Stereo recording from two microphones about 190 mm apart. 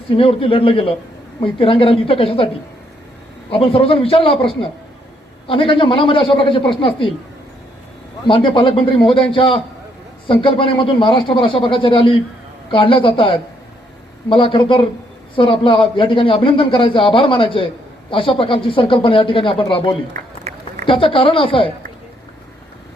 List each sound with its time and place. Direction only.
0.1 s a man's voice: 30° left (ahead or behind)
3.5 s a man's voice: 30° left (ahead or behind)
8.3 s a man's voice: 25° left (ahead or behind)
20.5 s a sound: 35° right (ahead or behind)
20.8 s a man's voice: 30° left (ahead or behind)